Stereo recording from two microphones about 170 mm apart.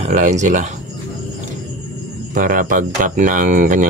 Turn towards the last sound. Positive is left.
turn(degrees=-50)  # may be behind; listen again after turning